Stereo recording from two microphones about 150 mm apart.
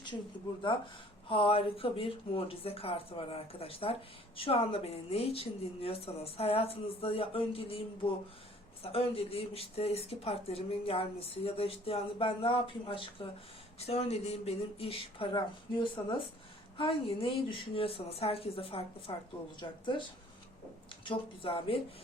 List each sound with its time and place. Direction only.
1.3 s speech: 35° left (ahead or behind)
21.0 s speech: 35° left (ahead or behind)